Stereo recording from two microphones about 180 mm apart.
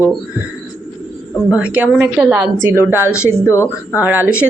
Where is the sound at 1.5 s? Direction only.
10° right (ahead or behind).